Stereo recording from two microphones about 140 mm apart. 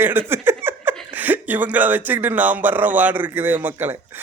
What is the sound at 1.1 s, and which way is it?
Speech, 10° right (ahead or behind).